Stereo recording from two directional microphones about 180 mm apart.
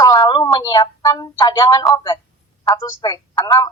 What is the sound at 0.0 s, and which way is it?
Speech, 20° left (ahead or behind).